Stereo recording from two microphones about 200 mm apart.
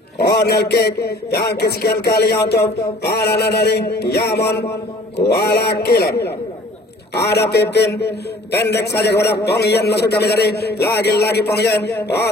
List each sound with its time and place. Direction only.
0.3 s a man's voice: 55° left (ahead or behind)